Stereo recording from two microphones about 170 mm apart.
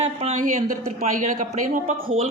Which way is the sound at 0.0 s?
35° right (ahead or behind).